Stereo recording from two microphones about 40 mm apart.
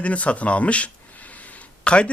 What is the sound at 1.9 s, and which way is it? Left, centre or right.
Speech, left.